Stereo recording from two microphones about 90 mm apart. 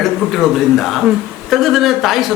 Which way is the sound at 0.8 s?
Centre (ahead or behind).